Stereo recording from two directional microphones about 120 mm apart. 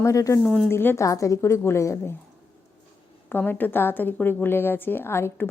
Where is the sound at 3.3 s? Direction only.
15° left (ahead or behind).